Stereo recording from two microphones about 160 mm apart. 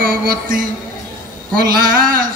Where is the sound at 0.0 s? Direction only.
65° right (ahead or behind).